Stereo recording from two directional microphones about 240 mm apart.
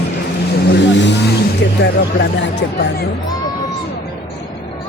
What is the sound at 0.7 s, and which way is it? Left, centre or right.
Vehicle, left.